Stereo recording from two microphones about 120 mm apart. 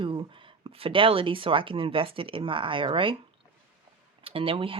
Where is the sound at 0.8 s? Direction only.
45° right (ahead or behind).